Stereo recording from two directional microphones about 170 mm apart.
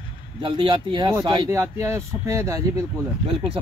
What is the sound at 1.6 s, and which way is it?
Speech, 15° right (ahead or behind).